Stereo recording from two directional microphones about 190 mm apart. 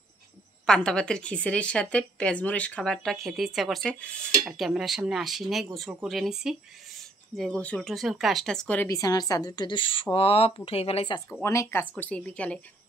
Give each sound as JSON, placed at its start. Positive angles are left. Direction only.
{"t": 0.7, "sound": "a woman's voice", "side_deg": 5}
{"t": 11.2, "sound": "speech", "side_deg": 10}